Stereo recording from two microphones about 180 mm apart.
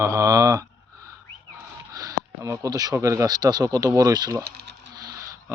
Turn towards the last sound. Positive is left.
turn(degrees=-20)  # may be behind; listen again after turning